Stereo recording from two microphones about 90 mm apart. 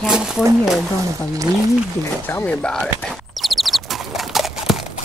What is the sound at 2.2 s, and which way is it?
Speech, 20° left (ahead or behind).